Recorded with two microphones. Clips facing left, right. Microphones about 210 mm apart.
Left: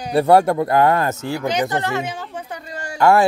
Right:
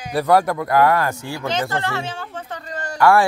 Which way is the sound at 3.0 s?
20° left (ahead or behind).